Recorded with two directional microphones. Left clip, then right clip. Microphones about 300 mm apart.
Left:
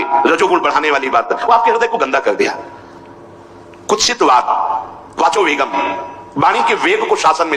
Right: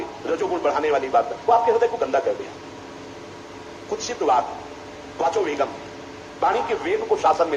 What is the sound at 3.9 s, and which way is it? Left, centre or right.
A man's voice, left.